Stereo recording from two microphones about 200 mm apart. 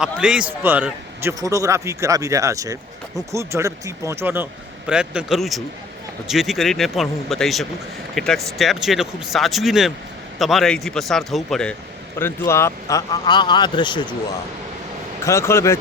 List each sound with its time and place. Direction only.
0.0 s a man's voice: 5° right (ahead or behind); by 14.1 s 25° left (ahead or behind)
15.2 s speech: 15° left (ahead or behind)